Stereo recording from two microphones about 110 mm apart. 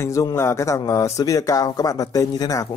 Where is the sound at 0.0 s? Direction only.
30° left (ahead or behind).